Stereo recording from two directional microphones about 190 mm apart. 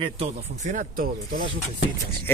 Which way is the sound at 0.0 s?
35° right (ahead or behind).